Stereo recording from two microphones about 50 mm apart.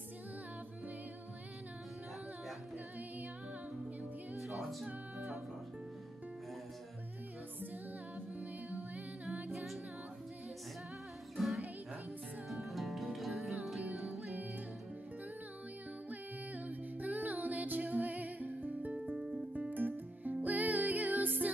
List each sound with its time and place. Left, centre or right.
4.4 s music: centre
4.8 s music: right
8.4 s music: right
11.3 s music: centre
12.6 s music: centre
14.1 s music: right
16.1 s music: right